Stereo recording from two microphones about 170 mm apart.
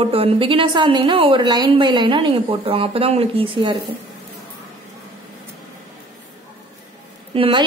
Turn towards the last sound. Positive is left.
turn(degrees=-30)  # may be behind; listen again after turning